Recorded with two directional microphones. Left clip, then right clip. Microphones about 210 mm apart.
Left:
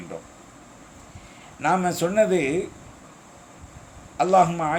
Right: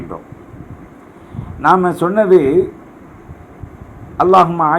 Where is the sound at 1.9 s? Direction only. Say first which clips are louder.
Right 9 dB; 10° left (ahead or behind).